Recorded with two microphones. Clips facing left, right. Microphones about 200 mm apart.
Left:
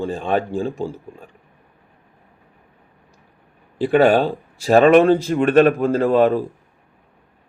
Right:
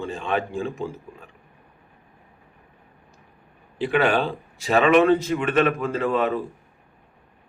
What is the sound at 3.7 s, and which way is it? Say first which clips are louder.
A man's voice: left 7 dB; 40° left (ahead or behind).